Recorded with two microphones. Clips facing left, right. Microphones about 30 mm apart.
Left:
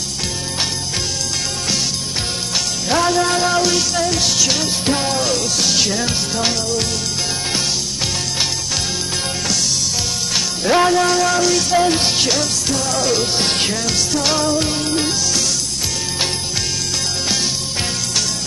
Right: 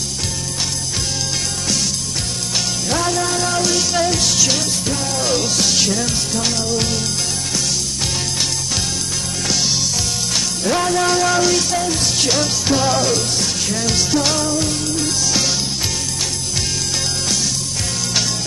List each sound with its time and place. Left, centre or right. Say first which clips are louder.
2.9 s music: left 4 dB; centre
3.9 s music: right 1 dB; centre
4.2 s music: even; centre
4.8 s music: left 4 dB; left
5.2 s music: even; centre
10.3 s music: left 4 dB; centre
11.0 s music: even; centre
11.8 s music: left 4 dB; left
12.2 s music: even; centre
12.6 s music: right 3 dB; centre
13.4 s music: left 3 dB; left
13.7 s music: right 1 dB; centre
14.3 s music: left 2 dB; centre